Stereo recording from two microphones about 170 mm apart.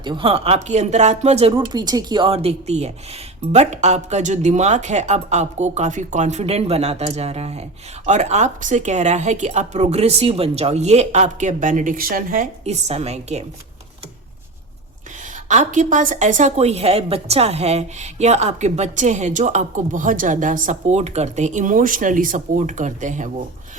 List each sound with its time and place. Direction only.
0.0 s speech: 30° right (ahead or behind); by 12.5 s 55° right (ahead or behind)
12.6 s speech: 40° right (ahead or behind)
15.4 s a woman's voice: 45° right (ahead or behind)